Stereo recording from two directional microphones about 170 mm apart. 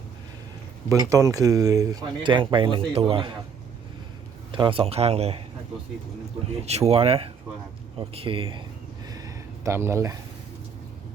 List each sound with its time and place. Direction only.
0.9 s speech: 20° right (ahead or behind)
4.5 s speech: 30° right (ahead or behind)
6.7 s speech: 40° right (ahead or behind)
9.0 s a sound: 20° right (ahead or behind)